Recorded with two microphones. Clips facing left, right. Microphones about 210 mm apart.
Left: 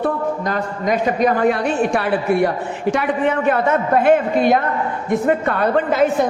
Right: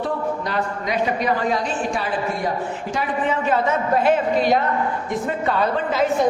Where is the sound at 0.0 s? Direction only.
50° left (ahead or behind).